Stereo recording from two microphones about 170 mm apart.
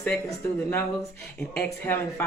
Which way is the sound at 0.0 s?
5° left (ahead or behind).